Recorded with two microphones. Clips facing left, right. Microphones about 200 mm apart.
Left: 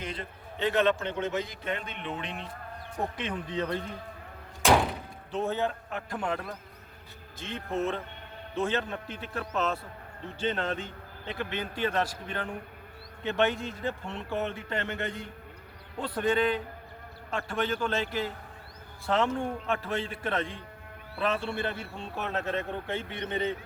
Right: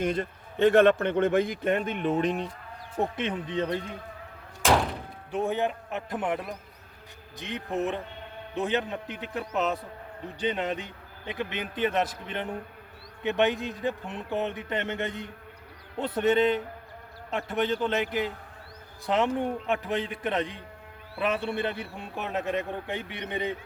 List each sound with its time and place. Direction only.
0.0 s a man's voice: 50° right (ahead or behind)
3.0 s a man's voice: 25° right (ahead or behind)
4.6 s thunk: centre (ahead or behind)
5.3 s a man's voice: 15° right (ahead or behind)